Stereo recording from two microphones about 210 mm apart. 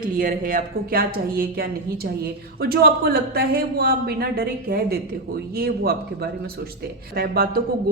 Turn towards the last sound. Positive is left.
turn(degrees=-45)  # may be behind; listen again after turning